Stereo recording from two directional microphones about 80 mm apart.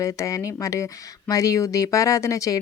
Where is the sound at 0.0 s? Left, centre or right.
Left.